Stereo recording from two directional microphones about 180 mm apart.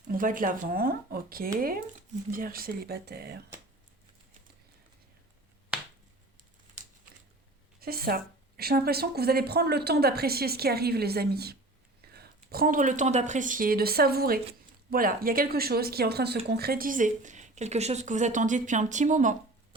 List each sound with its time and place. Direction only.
0.1 s a woman's voice: 50° right (ahead or behind)
7.8 s a woman's voice: 60° right (ahead or behind)